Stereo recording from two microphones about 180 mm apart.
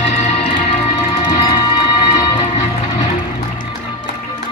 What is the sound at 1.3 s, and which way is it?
Music, 25° left (ahead or behind).